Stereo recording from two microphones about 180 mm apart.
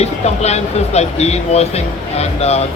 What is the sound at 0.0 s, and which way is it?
Speech, 35° left (ahead or behind).